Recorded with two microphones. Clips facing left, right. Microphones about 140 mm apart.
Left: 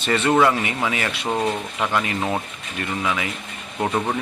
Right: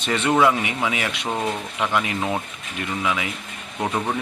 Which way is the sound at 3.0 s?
10° right (ahead or behind).